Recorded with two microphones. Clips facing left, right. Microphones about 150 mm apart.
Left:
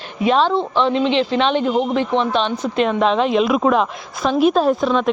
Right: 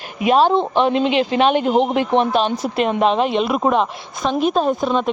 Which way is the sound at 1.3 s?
50° right (ahead or behind).